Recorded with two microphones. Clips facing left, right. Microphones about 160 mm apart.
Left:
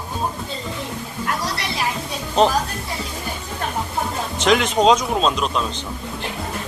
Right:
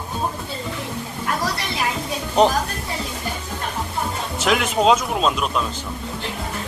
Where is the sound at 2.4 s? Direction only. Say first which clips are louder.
Even; 15° right (ahead or behind).